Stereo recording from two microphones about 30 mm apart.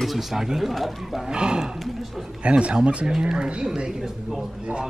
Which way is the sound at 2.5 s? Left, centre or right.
Right.